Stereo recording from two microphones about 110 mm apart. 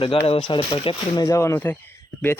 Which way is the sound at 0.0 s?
55° left (ahead or behind).